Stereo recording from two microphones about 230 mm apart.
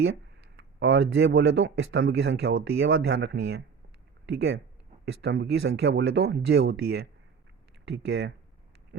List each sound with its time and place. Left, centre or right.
0.5 s speech: right